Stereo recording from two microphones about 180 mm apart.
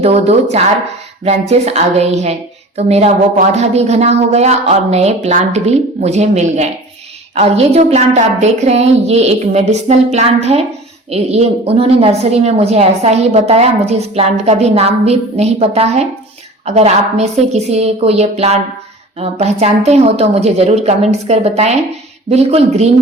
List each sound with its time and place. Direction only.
0.0 s a woman's voice: 35° right (ahead or behind)